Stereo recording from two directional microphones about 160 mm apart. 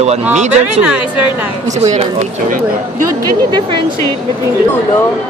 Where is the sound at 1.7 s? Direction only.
40° right (ahead or behind).